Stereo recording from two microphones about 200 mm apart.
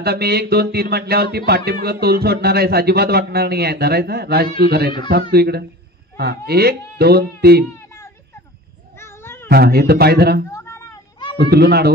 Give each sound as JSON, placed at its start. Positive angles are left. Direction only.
{"t": 0.0, "sound": "speech", "side_deg": -55}
{"t": 9.0, "sound": "cat", "side_deg": 10}
{"t": 9.5, "sound": "speech", "side_deg": -50}
{"t": 10.5, "sound": "a sound", "side_deg": 15}
{"t": 11.3, "sound": "speech", "side_deg": -55}